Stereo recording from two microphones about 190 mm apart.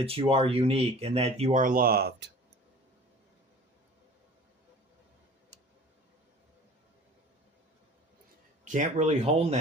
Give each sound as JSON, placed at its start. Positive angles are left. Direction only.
{"t": 0.0, "sound": "speech", "side_deg": -30}
{"t": 8.6, "sound": "speech", "side_deg": -40}